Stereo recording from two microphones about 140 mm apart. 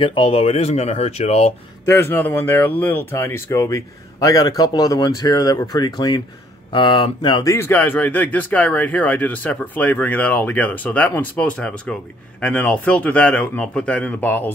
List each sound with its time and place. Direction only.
0.0 s speech: 40° left (ahead or behind)
1.9 s speech: 15° left (ahead or behind)
7.5 s speech: 15° left (ahead or behind)